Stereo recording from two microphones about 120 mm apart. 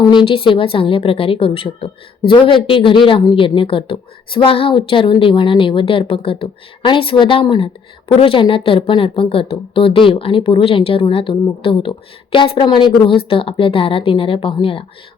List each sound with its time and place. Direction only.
0.1 s speech: 45° left (ahead or behind)